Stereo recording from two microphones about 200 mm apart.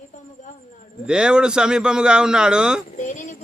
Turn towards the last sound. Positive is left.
turn(degrees=40)  # may be behind; listen again after turning